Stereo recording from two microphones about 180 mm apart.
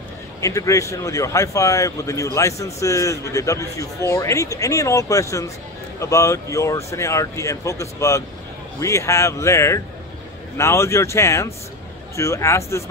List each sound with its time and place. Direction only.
0.4 s speech: 15° left (ahead or behind)